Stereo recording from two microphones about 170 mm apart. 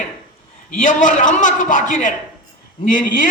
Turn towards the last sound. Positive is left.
turn(degrees=55)  # may be behind; listen again after turning